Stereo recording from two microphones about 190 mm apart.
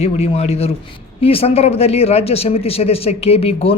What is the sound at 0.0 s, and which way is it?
A man's voice, 35° left (ahead or behind).